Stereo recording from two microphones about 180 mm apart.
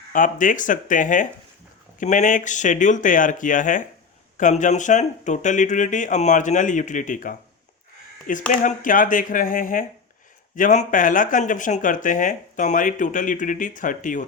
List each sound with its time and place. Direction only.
0.1 s speech: 45° left (ahead or behind)